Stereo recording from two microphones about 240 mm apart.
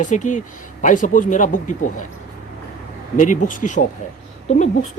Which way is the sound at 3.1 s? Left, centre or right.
Left.